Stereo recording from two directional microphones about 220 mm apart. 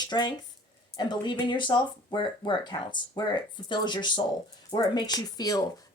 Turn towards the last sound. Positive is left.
turn(degrees=15)  # may be behind; listen again after turning